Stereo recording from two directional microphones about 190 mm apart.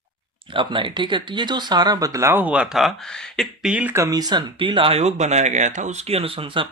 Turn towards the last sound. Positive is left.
turn(degrees=-25)  # may be behind; listen again after turning